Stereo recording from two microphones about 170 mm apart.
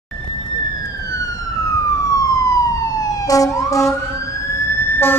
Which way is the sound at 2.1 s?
20° left (ahead or behind).